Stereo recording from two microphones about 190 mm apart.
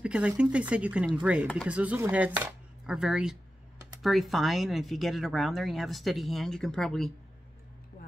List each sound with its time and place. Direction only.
0.0 s speech: 5° right (ahead or behind)